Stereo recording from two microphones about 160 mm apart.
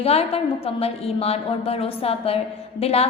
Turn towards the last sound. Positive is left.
turn(degrees=40)  # may be behind; listen again after turning